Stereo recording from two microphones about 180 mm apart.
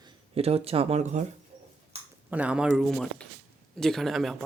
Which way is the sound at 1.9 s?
35° right (ahead or behind).